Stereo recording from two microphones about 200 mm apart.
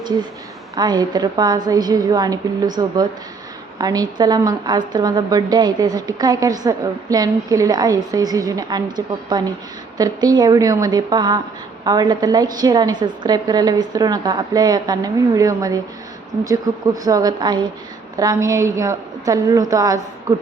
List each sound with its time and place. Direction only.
0.8 s a woman's voice: 20° right (ahead or behind)